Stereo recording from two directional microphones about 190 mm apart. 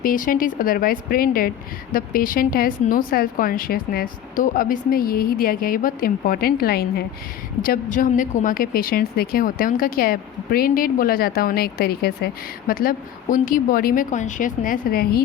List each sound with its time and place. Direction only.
0.0 s a woman's voice: 45° left (ahead or behind)